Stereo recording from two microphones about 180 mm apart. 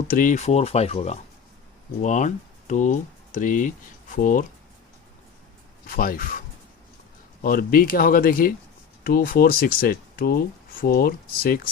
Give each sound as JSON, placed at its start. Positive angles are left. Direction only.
{"t": 0.1, "sound": "speech", "side_deg": 50}
{"t": 5.8, "sound": "speech", "side_deg": 50}
{"t": 7.4, "sound": "speech", "side_deg": 50}